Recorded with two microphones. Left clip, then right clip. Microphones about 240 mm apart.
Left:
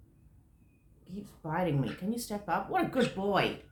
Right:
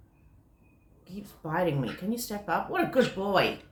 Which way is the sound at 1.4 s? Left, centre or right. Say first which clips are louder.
Right 4 dB; centre.